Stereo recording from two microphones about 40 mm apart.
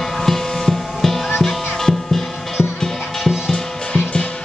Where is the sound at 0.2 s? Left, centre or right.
Centre.